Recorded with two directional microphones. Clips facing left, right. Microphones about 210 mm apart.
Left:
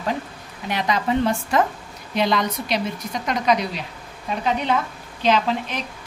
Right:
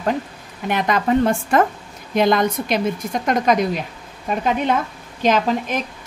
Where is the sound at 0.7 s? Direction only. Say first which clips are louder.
Right 4 dB; 50° right (ahead or behind).